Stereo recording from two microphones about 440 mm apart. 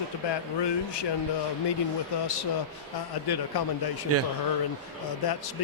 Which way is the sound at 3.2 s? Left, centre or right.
Left.